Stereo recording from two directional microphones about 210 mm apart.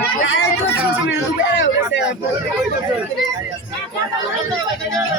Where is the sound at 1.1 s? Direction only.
60° left (ahead or behind).